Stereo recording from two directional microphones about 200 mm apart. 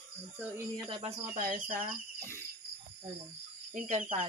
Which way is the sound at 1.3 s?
45° right (ahead or behind).